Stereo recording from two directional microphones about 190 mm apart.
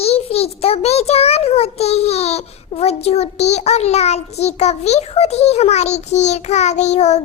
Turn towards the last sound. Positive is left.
turn(degrees=35)  # may be behind; listen again after turning